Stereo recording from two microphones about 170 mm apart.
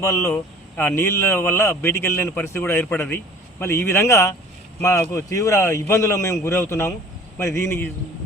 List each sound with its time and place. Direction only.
0.0 s speech: 15° left (ahead or behind)